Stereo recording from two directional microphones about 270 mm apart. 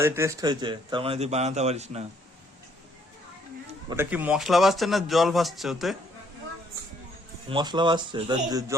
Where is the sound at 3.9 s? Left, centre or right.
Centre.